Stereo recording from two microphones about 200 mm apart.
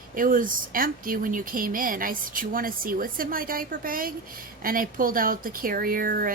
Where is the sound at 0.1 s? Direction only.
45° right (ahead or behind).